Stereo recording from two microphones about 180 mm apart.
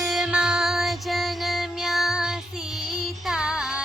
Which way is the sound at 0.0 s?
Centre (ahead or behind).